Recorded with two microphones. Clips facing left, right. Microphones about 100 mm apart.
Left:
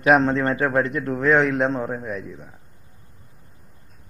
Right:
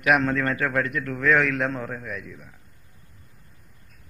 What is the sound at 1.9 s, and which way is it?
Speech, 25° left (ahead or behind).